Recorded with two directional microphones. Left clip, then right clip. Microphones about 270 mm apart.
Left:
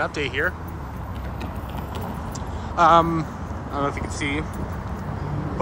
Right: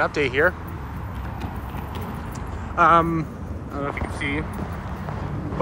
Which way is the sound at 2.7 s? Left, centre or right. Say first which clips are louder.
Left 1 dB; centre.